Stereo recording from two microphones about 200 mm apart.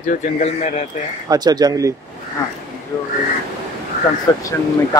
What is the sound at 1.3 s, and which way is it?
Speech, 20° right (ahead or behind).